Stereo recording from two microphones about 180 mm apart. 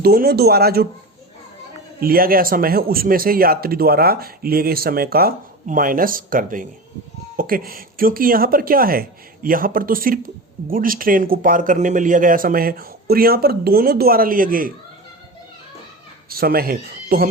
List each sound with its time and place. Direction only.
0.0 s speech: 60° right (ahead or behind)
2.0 s speech: 55° right (ahead or behind)
16.3 s speech: 55° right (ahead or behind)